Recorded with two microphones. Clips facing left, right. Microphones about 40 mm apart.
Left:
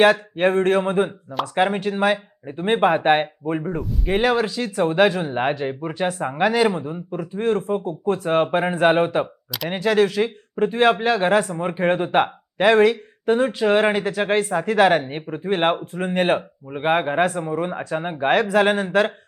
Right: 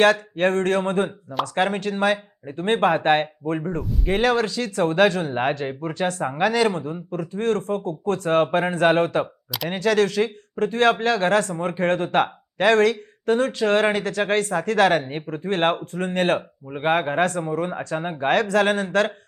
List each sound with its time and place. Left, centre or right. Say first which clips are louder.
0.0 s speech: left 2 dB; centre